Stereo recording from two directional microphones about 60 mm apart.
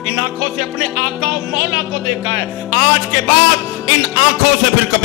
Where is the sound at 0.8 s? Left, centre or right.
Centre.